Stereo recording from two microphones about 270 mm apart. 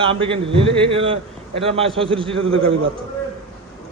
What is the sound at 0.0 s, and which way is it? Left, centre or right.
A man's voice, centre.